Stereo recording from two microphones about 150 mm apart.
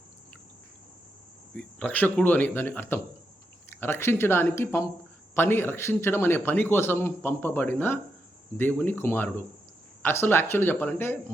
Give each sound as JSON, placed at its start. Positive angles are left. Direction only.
{"t": 1.5, "sound": "a man's voice", "side_deg": 10}